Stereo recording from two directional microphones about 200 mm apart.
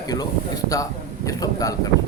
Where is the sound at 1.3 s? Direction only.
15° left (ahead or behind).